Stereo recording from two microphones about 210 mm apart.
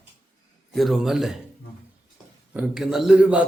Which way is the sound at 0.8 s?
Centre (ahead or behind).